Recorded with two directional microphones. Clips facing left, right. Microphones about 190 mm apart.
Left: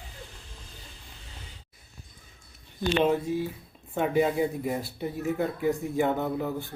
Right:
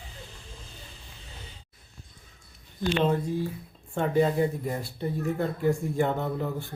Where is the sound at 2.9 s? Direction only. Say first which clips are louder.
Left 2 dB; 10° left (ahead or behind).